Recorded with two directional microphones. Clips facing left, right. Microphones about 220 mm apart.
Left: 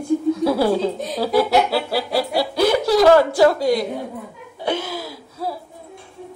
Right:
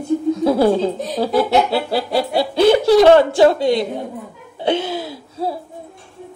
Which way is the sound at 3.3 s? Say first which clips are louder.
Right 2 dB; 25° right (ahead or behind).